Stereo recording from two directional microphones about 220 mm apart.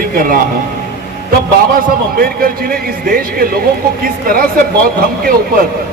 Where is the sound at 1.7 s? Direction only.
40° right (ahead or behind).